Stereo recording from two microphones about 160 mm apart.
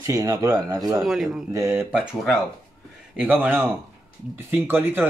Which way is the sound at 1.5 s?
15° right (ahead or behind).